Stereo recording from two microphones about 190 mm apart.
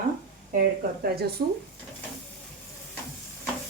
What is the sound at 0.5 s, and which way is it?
Speech, 50° right (ahead or behind).